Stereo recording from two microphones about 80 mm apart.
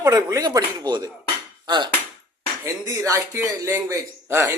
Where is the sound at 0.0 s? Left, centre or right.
Right.